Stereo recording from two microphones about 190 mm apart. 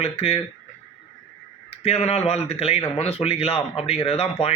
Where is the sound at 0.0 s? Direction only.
35° left (ahead or behind).